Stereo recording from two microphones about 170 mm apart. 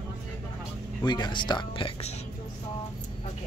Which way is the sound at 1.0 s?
25° left (ahead or behind).